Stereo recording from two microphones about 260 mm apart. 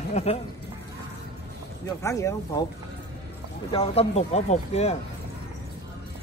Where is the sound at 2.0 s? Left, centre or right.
Centre.